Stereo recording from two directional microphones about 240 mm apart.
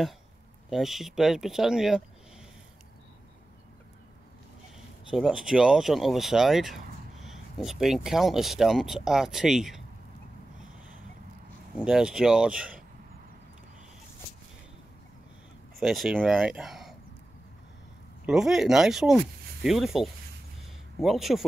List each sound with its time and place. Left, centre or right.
0.7 s speech: centre
5.1 s speech: centre
11.8 s speech: centre
15.8 s speech: centre
18.2 s speech: centre